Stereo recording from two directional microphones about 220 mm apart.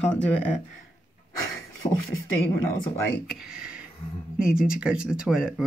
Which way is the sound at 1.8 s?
20° left (ahead or behind).